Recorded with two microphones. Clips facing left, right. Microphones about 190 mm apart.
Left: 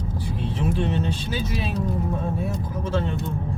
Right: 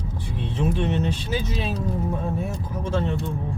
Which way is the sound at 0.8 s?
30° left (ahead or behind).